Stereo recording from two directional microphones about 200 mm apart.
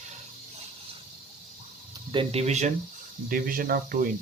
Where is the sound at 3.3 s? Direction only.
45° right (ahead or behind).